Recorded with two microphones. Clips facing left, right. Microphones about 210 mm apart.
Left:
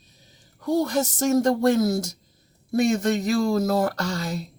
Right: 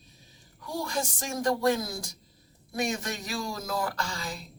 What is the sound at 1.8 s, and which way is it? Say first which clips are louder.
Speech: left 14 dB; 45° left (ahead or behind).